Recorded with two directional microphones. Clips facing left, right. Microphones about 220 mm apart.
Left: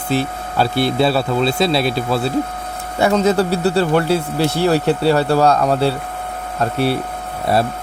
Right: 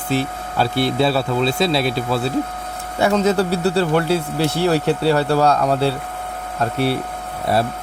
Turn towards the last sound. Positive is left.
turn(degrees=40)  # may be behind; listen again after turning